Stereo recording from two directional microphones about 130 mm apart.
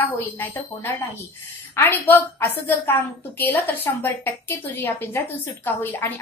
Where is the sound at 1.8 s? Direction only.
15° left (ahead or behind).